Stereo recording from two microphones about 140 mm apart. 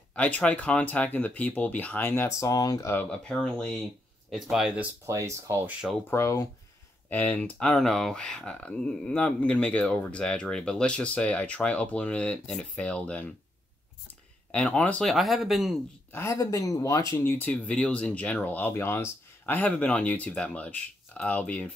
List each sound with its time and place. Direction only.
0.1 s speech: 10° left (ahead or behind)
3.1 s speech: 5° left (ahead or behind)
5.0 s speech: 20° right (ahead or behind)
6.0 s speech: 20° left (ahead or behind)
14.5 s speech: 10° left (ahead or behind)
16.1 s speech: 20° left (ahead or behind)
17.2 s speech: 15° left (ahead or behind)